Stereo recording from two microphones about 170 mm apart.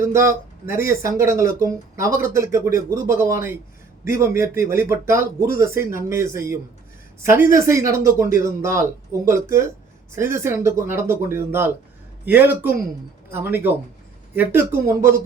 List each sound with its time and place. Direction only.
0.0 s speech: 15° right (ahead or behind)